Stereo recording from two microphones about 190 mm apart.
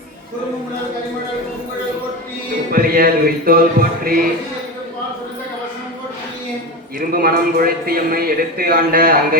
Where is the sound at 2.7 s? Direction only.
50° right (ahead or behind).